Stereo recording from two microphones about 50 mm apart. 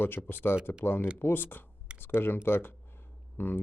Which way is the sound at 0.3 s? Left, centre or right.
Left.